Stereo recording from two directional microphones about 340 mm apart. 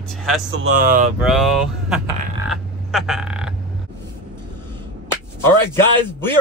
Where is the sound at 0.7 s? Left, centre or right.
Right.